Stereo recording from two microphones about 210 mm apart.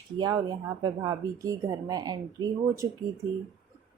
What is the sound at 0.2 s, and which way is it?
Speech, 20° right (ahead or behind).